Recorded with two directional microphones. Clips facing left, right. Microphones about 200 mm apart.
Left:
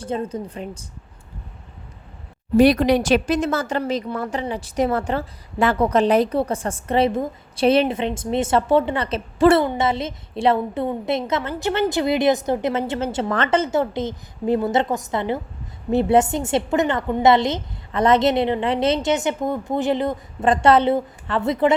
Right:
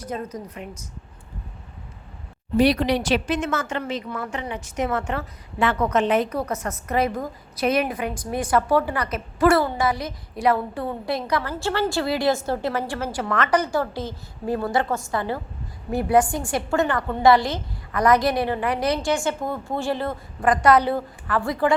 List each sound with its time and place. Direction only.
0.0 s a woman's voice: 30° left (ahead or behind)
2.6 s a woman's voice: 45° left (ahead or behind); by 21.8 s 20° left (ahead or behind)